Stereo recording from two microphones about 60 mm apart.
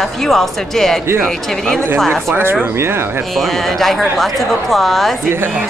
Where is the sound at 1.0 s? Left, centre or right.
Right.